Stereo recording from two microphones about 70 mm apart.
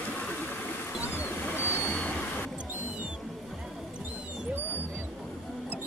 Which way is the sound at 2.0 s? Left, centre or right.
Left.